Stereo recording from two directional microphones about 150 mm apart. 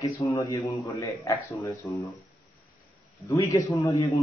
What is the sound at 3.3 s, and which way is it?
Speech, 25° left (ahead or behind).